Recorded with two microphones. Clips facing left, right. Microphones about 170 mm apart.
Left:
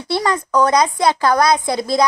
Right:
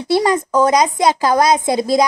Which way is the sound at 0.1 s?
20° right (ahead or behind).